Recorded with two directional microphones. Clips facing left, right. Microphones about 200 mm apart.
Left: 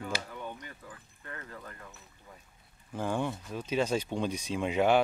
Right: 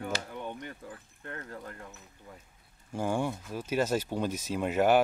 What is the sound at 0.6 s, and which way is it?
Speech, 55° right (ahead or behind).